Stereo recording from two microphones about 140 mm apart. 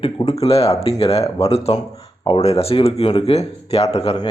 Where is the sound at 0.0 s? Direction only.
45° left (ahead or behind).